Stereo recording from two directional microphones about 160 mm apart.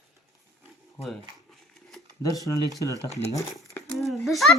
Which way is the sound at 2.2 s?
20° left (ahead or behind).